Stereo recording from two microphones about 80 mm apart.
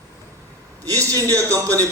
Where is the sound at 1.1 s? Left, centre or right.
Right.